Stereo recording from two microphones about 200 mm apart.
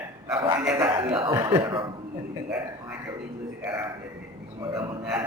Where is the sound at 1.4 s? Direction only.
15° right (ahead or behind).